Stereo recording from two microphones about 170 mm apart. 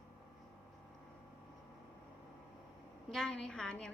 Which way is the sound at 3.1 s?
Centre (ahead or behind).